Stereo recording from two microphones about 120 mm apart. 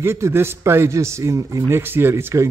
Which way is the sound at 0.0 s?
20° right (ahead or behind).